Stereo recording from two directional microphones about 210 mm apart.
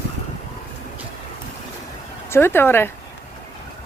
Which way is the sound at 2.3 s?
10° left (ahead or behind).